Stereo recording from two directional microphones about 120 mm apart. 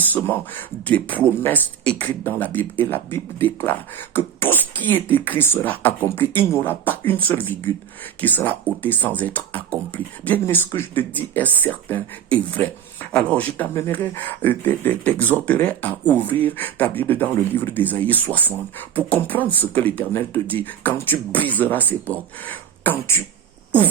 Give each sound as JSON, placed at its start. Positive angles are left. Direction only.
{"t": 0.0, "sound": "speech", "side_deg": 15}